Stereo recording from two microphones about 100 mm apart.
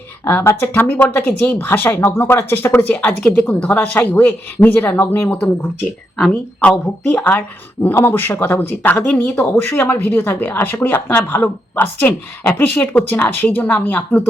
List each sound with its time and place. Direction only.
0.3 s speech: 20° left (ahead or behind)
6.1 s speech: 5° left (ahead or behind)